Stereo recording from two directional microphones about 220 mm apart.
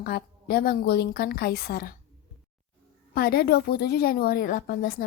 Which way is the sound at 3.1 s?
45° left (ahead or behind).